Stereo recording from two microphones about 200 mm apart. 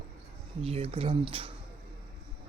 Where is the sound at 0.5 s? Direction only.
30° right (ahead or behind).